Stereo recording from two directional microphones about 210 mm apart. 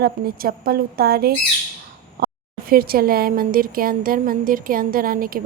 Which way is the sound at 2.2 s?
45° right (ahead or behind).